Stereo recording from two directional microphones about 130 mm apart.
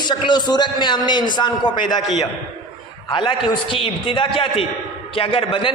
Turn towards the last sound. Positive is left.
turn(degrees=45)  # may be behind; listen again after turning